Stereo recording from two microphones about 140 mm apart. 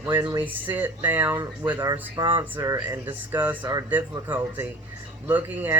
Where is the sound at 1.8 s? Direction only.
30° right (ahead or behind).